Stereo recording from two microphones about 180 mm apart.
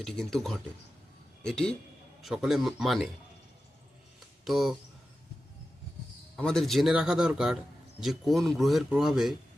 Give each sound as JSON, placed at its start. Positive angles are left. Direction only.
{"t": 0.0, "sound": "speech", "side_deg": 0}
{"t": 4.4, "sound": "speech", "side_deg": 0}
{"t": 6.3, "sound": "speech", "side_deg": 5}